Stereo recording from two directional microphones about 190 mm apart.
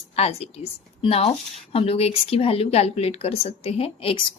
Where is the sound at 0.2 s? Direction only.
30° left (ahead or behind).